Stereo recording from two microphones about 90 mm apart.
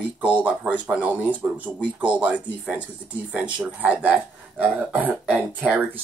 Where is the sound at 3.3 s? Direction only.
15° right (ahead or behind).